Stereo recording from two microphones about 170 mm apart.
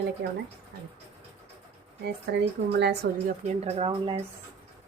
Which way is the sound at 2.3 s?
80° right.